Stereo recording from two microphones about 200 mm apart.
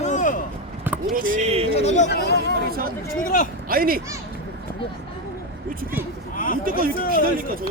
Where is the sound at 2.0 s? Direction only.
55° left (ahead or behind).